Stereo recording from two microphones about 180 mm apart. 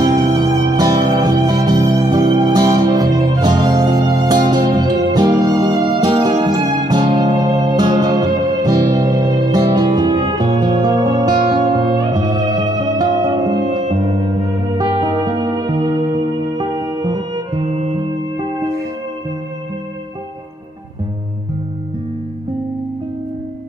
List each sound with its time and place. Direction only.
0.0 s music: 20° right (ahead or behind)